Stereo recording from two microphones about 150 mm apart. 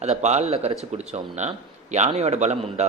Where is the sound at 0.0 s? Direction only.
50° right (ahead or behind).